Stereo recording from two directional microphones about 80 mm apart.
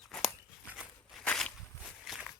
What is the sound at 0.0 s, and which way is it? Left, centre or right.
Walk, centre.